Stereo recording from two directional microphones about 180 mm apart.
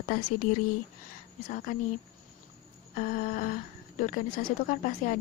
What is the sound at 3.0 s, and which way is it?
Speech, 50° left (ahead or behind).